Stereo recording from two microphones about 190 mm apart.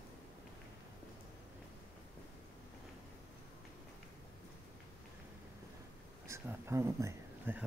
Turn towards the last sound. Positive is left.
turn(degrees=-10)  # may be behind; listen again after turning